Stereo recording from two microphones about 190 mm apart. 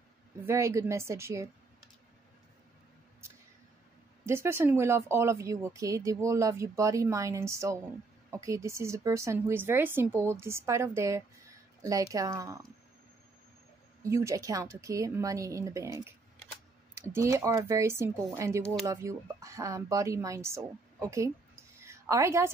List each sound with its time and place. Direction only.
0.5 s speech: 15° right (ahead or behind)
4.3 s speech: 15° right (ahead or behind)
14.0 s speech: 15° right (ahead or behind)
21.7 s a sound: 15° right (ahead or behind)